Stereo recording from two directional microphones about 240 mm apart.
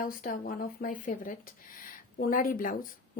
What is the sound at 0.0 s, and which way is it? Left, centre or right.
Speech, left.